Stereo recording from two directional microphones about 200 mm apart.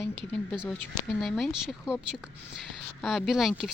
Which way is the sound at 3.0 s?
Centre (ahead or behind).